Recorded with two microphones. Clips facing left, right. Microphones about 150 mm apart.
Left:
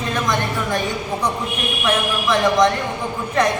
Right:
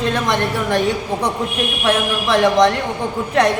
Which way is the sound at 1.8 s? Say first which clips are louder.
Right 2 dB; 35° right (ahead or behind).